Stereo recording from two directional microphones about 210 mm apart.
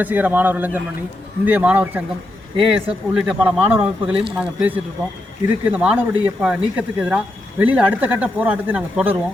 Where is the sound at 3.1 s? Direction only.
5° right (ahead or behind).